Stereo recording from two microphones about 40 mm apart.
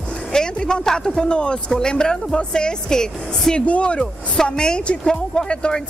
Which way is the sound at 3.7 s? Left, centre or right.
Left.